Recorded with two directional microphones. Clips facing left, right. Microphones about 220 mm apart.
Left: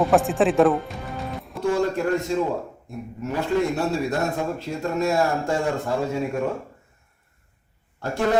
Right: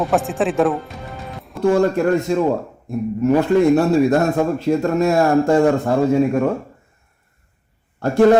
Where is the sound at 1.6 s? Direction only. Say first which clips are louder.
Right 7 dB; 60° right (ahead or behind).